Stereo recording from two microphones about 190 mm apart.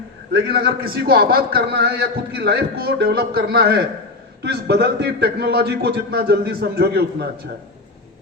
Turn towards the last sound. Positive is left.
turn(degrees=-55)  # may be behind; listen again after turning